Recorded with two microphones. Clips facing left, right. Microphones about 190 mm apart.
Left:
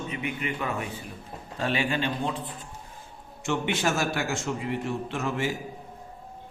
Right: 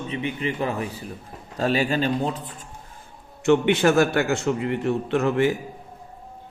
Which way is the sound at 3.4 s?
60° right (ahead or behind).